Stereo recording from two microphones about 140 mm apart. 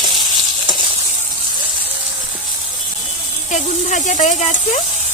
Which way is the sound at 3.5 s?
60° left (ahead or behind).